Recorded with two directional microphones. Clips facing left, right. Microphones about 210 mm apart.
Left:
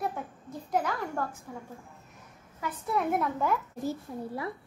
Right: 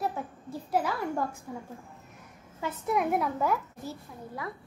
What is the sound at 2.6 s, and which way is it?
Speech, 20° right (ahead or behind).